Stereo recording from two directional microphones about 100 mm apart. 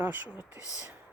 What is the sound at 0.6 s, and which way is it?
Speech, 35° left (ahead or behind).